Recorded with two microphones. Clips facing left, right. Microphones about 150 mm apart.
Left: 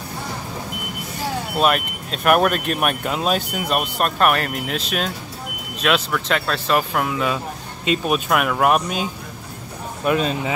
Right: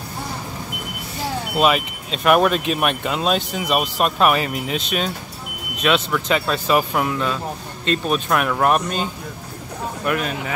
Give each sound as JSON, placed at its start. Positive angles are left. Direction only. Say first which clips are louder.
{"t": 1.6, "sound": "speech", "louder": "right 1 dB", "side_deg": 0}
{"t": 10.0, "sound": "speech", "louder": "left 4 dB", "side_deg": 25}